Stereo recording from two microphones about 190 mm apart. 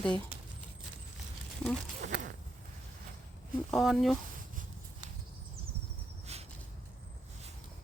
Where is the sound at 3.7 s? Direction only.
Centre (ahead or behind).